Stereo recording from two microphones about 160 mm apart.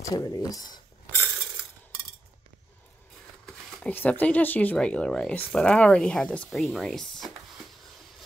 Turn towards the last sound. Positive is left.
turn(degrees=5)  # may be behind; listen again after turning